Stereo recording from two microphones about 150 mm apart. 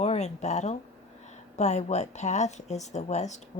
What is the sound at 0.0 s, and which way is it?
A woman's voice, 45° left (ahead or behind).